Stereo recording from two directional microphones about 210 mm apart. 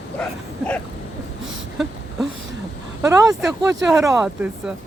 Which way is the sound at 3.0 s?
15° right (ahead or behind).